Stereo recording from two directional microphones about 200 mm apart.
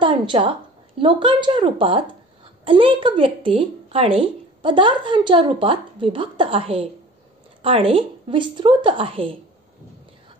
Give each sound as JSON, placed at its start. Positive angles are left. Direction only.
{"t": 0.0, "sound": "a woman's voice", "side_deg": -25}